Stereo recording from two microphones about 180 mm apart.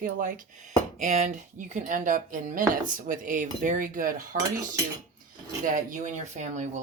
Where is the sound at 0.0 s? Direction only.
50° right (ahead or behind).